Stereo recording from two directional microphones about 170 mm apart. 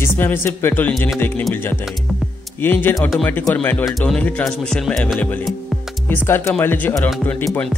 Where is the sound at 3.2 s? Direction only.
10° left (ahead or behind).